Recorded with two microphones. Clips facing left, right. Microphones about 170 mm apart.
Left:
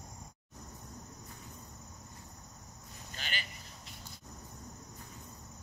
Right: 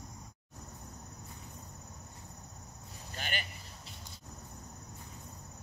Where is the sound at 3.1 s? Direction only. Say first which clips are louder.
Right 4 dB; 50° right (ahead or behind).